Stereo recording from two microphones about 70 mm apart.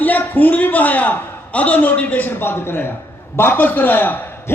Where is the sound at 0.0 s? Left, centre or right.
Left.